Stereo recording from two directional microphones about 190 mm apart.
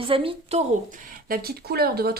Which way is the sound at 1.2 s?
50° right (ahead or behind).